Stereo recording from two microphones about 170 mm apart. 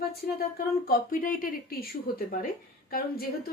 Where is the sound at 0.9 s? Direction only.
55° left (ahead or behind).